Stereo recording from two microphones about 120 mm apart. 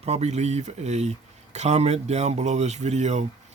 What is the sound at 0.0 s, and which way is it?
Speech, 65° right (ahead or behind).